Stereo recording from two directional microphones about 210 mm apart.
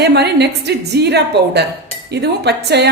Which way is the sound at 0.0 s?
50° right (ahead or behind).